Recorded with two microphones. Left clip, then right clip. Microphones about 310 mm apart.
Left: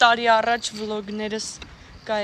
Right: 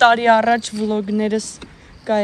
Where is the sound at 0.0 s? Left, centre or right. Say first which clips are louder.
Right 4 dB; centre.